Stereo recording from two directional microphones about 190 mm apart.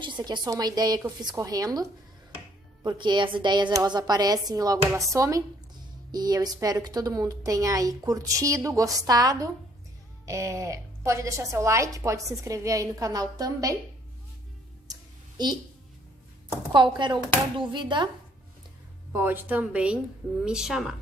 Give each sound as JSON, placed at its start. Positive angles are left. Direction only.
{"t": 0.0, "sound": "a woman's voice", "side_deg": -25}
{"t": 14.9, "sound": "a sound", "side_deg": -20}
{"t": 16.7, "sound": "a woman's voice", "side_deg": -25}
{"t": 19.1, "sound": "a woman's voice", "side_deg": -10}